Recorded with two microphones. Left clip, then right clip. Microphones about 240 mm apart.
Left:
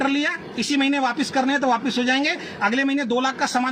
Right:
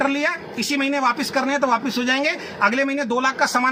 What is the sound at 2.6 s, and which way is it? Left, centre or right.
Speech, right.